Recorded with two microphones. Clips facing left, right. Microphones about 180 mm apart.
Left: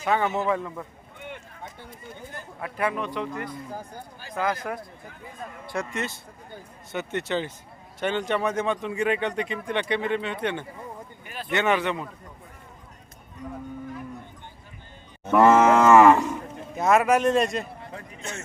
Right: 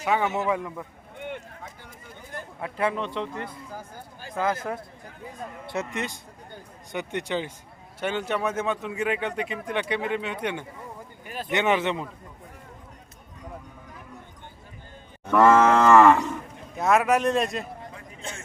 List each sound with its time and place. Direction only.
0.0 s speech: 10° right (ahead or behind)
2.6 s a man's voice: 25° right (ahead or behind)
15.2 s moo: 15° left (ahead or behind)
16.7 s speech: centre (ahead or behind)
18.2 s a sound: 30° right (ahead or behind)